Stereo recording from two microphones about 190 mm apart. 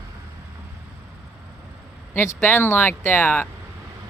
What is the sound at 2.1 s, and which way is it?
Speech, 10° left (ahead or behind).